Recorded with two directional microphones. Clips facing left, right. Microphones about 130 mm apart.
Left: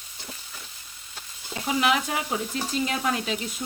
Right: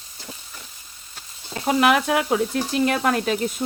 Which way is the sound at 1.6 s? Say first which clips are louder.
Right 6 dB; 55° right (ahead or behind).